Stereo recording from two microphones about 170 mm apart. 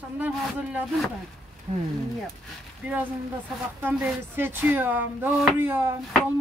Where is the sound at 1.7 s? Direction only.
40° right (ahead or behind).